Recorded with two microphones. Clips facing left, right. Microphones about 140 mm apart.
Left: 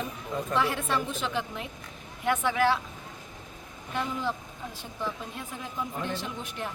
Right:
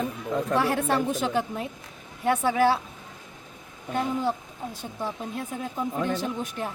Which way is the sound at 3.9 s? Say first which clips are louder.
Right 5 dB; 40° right (ahead or behind).